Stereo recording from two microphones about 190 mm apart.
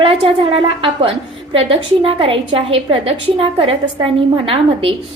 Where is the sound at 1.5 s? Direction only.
30° right (ahead or behind).